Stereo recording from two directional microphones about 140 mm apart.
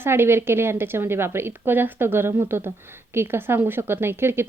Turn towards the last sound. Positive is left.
turn(degrees=-15)  # may be behind; listen again after turning